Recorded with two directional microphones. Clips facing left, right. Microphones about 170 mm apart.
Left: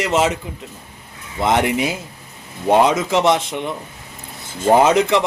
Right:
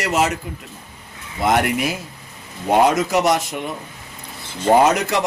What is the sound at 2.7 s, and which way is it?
Speech, 25° left (ahead or behind).